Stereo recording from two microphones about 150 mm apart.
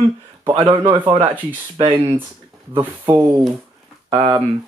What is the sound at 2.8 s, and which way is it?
Speech, 15° right (ahead or behind).